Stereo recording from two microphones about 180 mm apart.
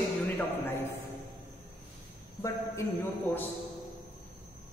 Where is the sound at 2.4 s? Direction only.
15° left (ahead or behind).